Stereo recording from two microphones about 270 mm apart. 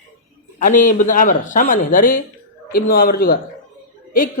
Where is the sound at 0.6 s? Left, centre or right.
Left.